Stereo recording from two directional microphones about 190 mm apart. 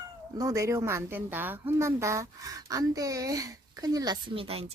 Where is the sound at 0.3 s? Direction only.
15° right (ahead or behind).